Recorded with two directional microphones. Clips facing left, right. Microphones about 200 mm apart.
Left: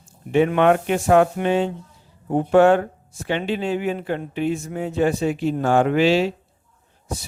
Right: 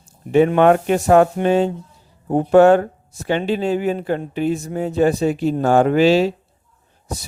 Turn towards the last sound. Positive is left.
turn(degrees=-40)  # may be behind; listen again after turning